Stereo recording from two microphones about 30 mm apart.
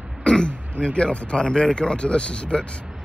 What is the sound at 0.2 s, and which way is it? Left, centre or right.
Throat clearing, left.